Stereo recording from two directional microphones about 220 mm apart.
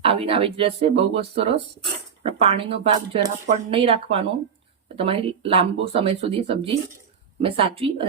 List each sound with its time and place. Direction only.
0.0 s speech: 25° right (ahead or behind)